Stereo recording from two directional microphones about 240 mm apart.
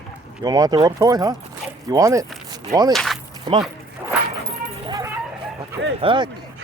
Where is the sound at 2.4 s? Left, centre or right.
Centre.